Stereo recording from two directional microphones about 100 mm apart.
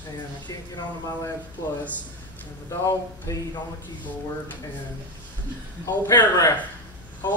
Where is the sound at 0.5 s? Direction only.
35° left (ahead or behind).